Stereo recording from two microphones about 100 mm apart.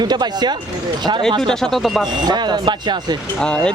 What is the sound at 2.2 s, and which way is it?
Speech, 45° right (ahead or behind).